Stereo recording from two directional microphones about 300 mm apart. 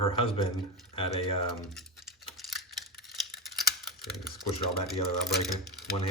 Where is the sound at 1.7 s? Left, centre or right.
Centre.